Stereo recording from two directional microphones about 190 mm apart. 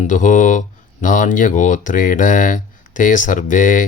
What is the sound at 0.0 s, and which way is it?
Speech, 40° left (ahead or behind).